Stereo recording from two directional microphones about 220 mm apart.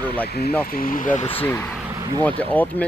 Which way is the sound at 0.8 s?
40° left (ahead or behind).